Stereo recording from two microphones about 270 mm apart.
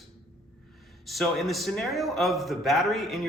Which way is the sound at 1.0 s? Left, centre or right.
Centre.